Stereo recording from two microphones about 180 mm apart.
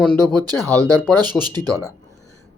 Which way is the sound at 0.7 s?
10° left (ahead or behind).